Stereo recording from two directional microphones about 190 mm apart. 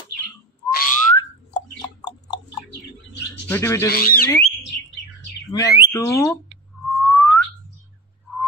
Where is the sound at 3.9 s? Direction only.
50° left (ahead or behind).